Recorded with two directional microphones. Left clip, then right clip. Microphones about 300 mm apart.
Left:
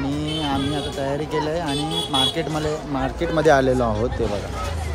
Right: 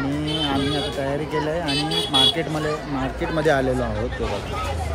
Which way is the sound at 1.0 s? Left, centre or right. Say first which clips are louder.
Left 1 dB; centre.